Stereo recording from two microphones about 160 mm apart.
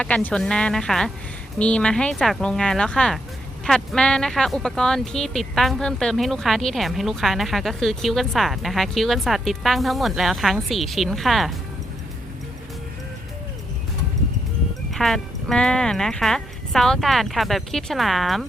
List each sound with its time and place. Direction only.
0.0 s speech: 10° left (ahead or behind)
14.9 s speech: centre (ahead or behind)